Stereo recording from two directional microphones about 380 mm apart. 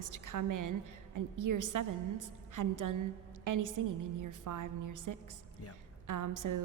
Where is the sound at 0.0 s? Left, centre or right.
Right.